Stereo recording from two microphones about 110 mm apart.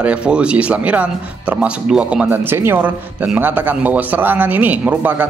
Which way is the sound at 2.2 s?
20° right (ahead or behind).